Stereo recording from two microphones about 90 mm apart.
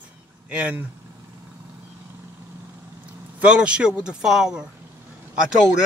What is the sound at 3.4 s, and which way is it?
Speech, 10° right (ahead or behind).